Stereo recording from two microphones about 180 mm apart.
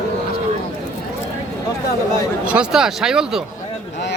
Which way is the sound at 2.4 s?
5° right (ahead or behind).